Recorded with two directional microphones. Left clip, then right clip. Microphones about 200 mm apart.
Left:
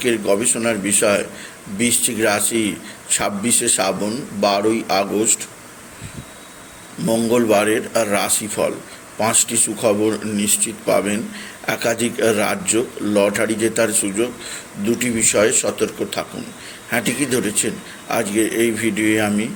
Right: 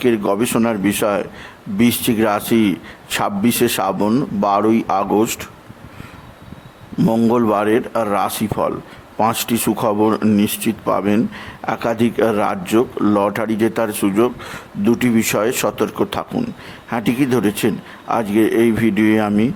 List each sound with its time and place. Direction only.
0.0 s speech: 25° right (ahead or behind)
7.0 s speech: 45° right (ahead or behind)
7.3 s speech: 25° right (ahead or behind)